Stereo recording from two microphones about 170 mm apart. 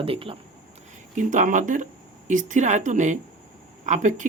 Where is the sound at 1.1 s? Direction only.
50° right (ahead or behind).